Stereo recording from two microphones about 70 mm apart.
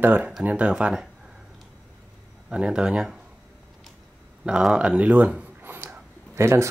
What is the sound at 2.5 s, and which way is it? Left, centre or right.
Speech, centre.